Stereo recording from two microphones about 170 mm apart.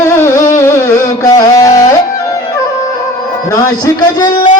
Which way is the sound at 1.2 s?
20° left (ahead or behind).